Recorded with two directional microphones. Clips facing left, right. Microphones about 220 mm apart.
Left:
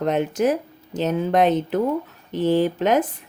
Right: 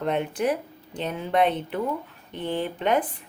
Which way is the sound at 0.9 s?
45° left (ahead or behind).